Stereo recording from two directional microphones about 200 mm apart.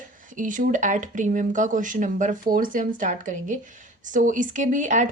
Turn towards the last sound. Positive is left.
turn(degrees=-40)  # may be behind; listen again after turning